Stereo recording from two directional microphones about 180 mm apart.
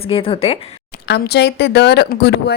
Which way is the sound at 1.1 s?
70° left (ahead or behind).